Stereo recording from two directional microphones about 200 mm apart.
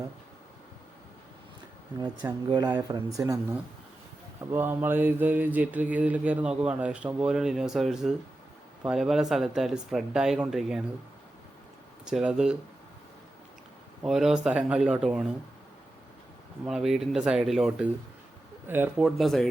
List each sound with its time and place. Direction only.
2.0 s speech: 20° right (ahead or behind)
4.4 s mantra: 10° right (ahead or behind)
8.8 s speech: centre (ahead or behind)
12.0 s speech: 5° right (ahead or behind)
14.0 s speech: centre (ahead or behind)
16.6 s speech: centre (ahead or behind)